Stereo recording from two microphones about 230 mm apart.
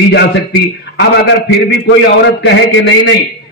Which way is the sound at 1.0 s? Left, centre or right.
Left.